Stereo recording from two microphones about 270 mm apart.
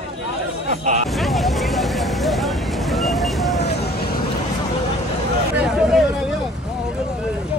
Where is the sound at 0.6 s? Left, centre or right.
Right.